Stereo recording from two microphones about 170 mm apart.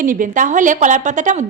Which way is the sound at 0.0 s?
50° right (ahead or behind).